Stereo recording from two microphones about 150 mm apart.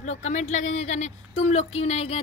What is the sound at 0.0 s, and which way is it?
Speech, 50° left (ahead or behind).